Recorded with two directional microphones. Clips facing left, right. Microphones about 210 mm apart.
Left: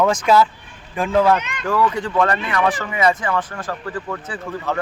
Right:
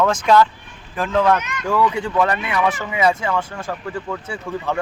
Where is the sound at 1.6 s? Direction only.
10° right (ahead or behind).